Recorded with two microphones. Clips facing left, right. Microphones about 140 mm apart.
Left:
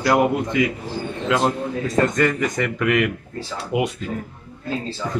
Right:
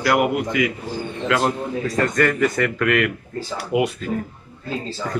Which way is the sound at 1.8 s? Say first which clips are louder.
Left 1 dB; 20° left (ahead or behind).